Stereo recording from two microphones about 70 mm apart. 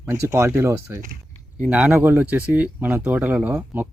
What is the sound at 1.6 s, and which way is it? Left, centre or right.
Speech, centre.